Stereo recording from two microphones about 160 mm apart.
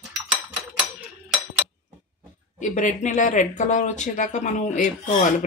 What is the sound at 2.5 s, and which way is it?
Speech, 50° left (ahead or behind).